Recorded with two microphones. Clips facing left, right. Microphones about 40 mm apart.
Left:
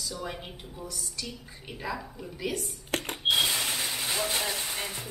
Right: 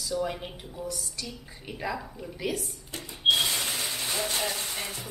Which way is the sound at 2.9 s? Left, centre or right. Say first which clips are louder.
Left 9 dB; left.